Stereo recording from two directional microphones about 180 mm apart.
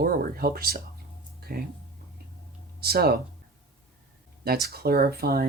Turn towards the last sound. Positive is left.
turn(degrees=-60)  # may be behind; listen again after turning